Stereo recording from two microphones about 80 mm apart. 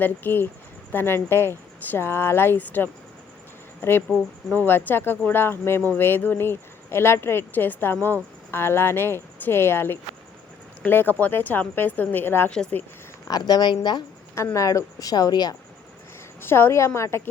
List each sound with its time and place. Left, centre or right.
0.0 s speech: left
13.2 s a woman's voice: left
14.3 s a woman's voice: left
16.4 s a woman's voice: left